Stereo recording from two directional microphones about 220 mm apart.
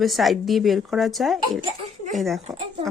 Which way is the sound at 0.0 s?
Centre (ahead or behind).